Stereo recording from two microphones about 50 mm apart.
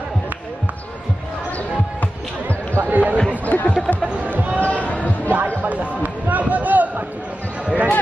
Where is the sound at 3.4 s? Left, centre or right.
Left.